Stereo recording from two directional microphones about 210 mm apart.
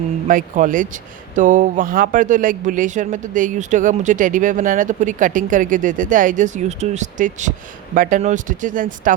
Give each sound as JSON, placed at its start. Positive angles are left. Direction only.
{"t": 0.3, "sound": "speech", "side_deg": -40}